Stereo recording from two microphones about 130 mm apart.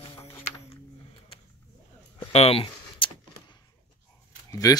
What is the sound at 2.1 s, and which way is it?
Keys jangling, 50° left (ahead or behind).